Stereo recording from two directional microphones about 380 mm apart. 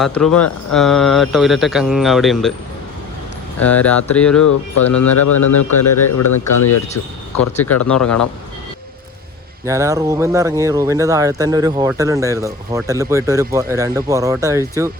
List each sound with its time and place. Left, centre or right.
0.0 s speech: centre
3.6 s speech: centre
4.9 s speech: left
7.5 s speech: centre
9.6 s speech: centre